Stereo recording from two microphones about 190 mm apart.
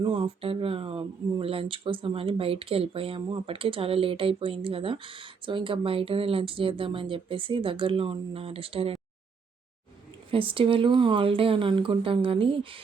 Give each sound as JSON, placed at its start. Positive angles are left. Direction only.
{"t": 0.0, "sound": "speech", "side_deg": -25}
{"t": 10.3, "sound": "speech", "side_deg": -25}